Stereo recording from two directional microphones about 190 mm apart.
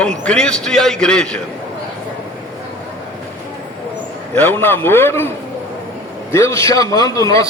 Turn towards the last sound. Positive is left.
turn(degrees=20)  # may be behind; listen again after turning